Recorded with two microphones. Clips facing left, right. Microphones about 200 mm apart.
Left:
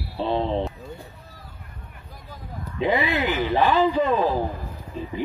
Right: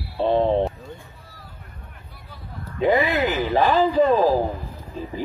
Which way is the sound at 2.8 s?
45° right (ahead or behind).